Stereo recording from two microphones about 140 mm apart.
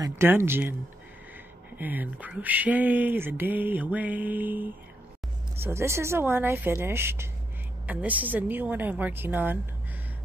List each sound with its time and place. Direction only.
0.0 s speech: 20° right (ahead or behind)
1.8 s speech: 10° right (ahead or behind)